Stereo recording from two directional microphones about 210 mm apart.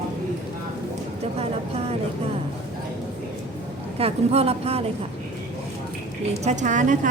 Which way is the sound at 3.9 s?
30° right (ahead or behind).